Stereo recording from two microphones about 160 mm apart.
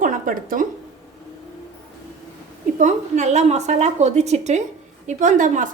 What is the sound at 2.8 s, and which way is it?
A woman's voice, 45° right (ahead or behind).